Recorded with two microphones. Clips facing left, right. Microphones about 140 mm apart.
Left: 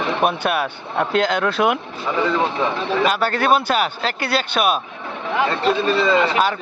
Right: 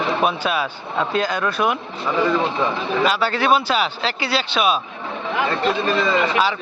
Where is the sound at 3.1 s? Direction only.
50° left (ahead or behind).